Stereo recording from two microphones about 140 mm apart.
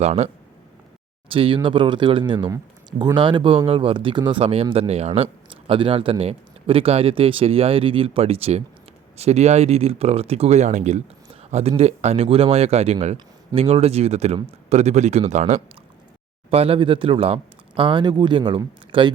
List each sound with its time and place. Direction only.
0.0 s speech: 50° right (ahead or behind)
1.3 s speech: 40° right (ahead or behind); by 15.6 s 55° right (ahead or behind)
16.5 s speech: 45° right (ahead or behind)